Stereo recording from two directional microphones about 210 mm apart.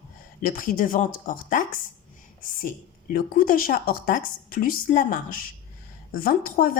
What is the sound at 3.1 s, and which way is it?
Speech, 40° left (ahead or behind).